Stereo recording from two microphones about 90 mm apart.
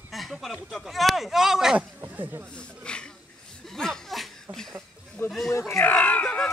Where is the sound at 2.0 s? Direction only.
25° right (ahead or behind).